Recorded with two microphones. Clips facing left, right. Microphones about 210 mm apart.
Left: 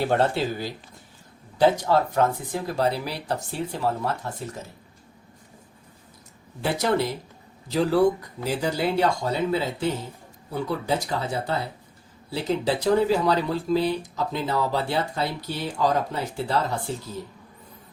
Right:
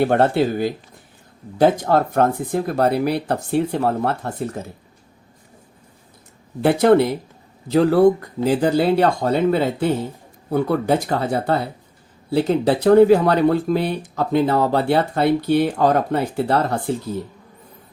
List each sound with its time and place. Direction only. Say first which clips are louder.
0.0 s speech: right 6 dB; 55° right (ahead or behind)
6.6 s speech: right 10 dB; 55° right (ahead or behind)